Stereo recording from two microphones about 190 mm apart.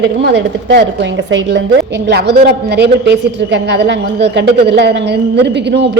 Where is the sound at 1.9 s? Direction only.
65° right (ahead or behind).